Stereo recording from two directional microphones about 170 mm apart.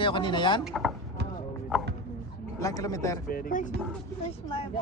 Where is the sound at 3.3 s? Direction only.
55° left (ahead or behind).